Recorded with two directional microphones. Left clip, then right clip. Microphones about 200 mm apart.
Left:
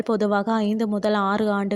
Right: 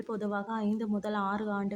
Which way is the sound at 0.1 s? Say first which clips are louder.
Left 12 dB; 40° left (ahead or behind).